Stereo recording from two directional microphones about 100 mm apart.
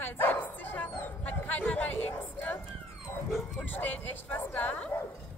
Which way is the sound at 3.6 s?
15° left (ahead or behind).